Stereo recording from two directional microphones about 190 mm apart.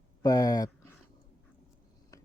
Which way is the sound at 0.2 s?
20° left (ahead or behind).